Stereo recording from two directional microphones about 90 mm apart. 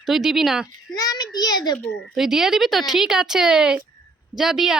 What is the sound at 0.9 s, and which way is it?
Speech, 45° left (ahead or behind).